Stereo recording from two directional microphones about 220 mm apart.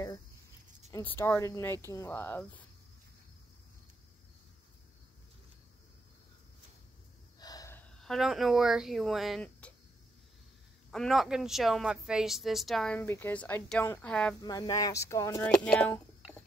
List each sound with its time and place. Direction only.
0.8 s speech: 10° left (ahead or behind)
7.3 s gasp: 15° left (ahead or behind)
8.0 s speech: centre (ahead or behind)
10.9 s speech: centre (ahead or behind)
14.4 s speech: 15° left (ahead or behind)